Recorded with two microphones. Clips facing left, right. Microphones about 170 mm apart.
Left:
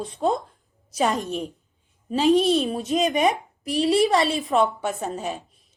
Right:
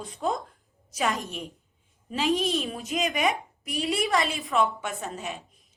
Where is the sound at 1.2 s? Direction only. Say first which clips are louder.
Left 8 dB; centre (ahead or behind).